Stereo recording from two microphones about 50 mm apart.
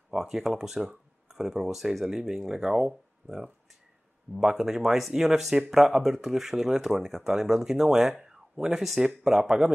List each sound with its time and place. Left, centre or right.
0.1 s speech: centre